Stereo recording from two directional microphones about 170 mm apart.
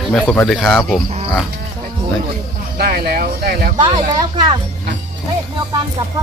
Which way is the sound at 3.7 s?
25° right (ahead or behind).